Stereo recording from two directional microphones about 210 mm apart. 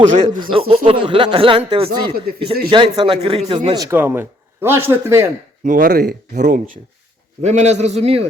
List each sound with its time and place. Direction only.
0.0 s a man's voice: 35° right (ahead or behind)
0.3 s speech: 20° right (ahead or behind)
2.3 s speech: 45° right (ahead or behind)
2.6 s speech: 20° right (ahead or behind)
5.6 s speech: 40° right (ahead or behind)
6.3 s a man's voice: 35° right (ahead or behind)